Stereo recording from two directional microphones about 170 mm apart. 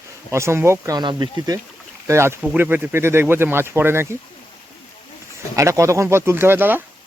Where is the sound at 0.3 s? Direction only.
15° right (ahead or behind).